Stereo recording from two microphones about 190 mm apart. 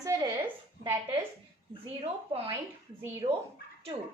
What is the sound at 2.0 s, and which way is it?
Speech, 30° right (ahead or behind).